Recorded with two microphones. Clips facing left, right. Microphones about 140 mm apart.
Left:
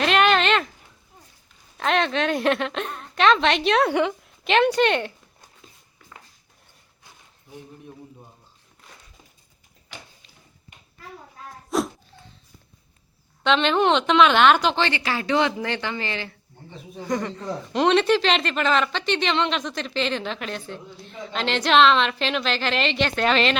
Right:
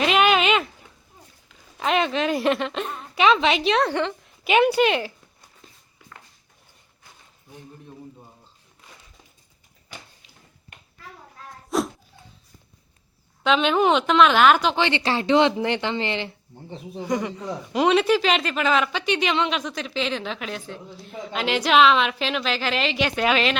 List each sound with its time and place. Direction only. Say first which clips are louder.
0.0 s a sound: even; 5° right (ahead or behind)
1.8 s a man's voice: even; 5° right (ahead or behind)
3.8 s a woman's voice: left 3 dB; 10° left (ahead or behind)
4.3 s a woman's voice: right 4 dB; 5° right (ahead or behind)
11.7 s a sound: even; centre (ahead or behind)
13.4 s a man's voice: even; 5° right (ahead or behind)
14.8 s speech: right 2 dB; 20° right (ahead or behind)
17.0 s a man's voice: right 1 dB; 10° right (ahead or behind)